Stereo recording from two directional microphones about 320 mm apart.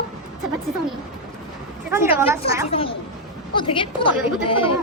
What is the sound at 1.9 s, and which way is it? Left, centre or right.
Speech, centre.